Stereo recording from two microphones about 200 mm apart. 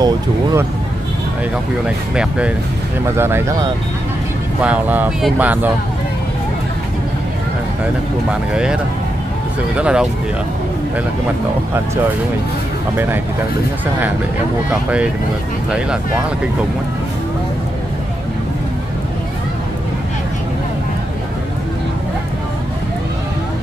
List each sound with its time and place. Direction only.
0.0 s speech: 20° right (ahead or behind)
2.1 s speech: 5° right (ahead or behind)
7.8 s speech: 5° right (ahead or behind)
9.8 s speech: 5° right (ahead or behind)
12.9 s speech: 10° right (ahead or behind)
14.7 s speech: 5° right (ahead or behind)